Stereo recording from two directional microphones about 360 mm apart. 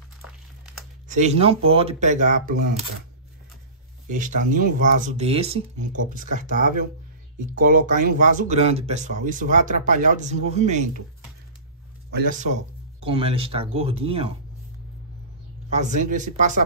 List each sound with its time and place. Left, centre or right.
1.0 s speech: centre
4.2 s speech: right
12.1 s speech: centre
15.7 s speech: centre